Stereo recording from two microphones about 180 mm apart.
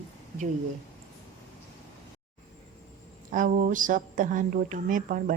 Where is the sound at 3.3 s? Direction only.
45° right (ahead or behind).